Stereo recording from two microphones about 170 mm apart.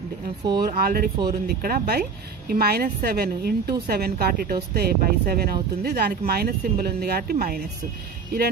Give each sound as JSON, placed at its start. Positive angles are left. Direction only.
{"t": 0.6, "sound": "speech", "side_deg": -60}